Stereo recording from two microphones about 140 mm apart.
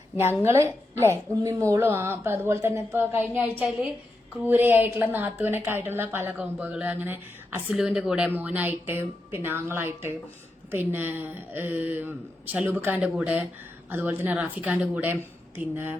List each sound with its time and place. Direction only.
0.2 s a woman's voice: 15° right (ahead or behind)